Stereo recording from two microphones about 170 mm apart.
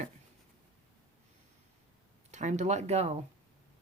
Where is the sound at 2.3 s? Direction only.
45° right (ahead or behind).